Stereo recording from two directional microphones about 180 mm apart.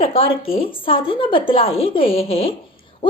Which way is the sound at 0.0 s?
30° left (ahead or behind).